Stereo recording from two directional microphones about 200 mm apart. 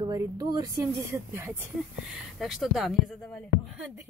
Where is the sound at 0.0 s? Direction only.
20° right (ahead or behind).